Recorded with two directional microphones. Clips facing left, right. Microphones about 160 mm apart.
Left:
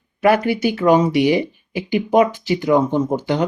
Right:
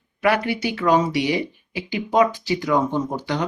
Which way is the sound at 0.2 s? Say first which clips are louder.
Left 5 dB; 25° left (ahead or behind).